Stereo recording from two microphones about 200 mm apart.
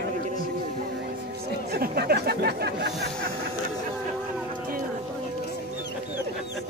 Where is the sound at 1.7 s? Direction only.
50° right (ahead or behind).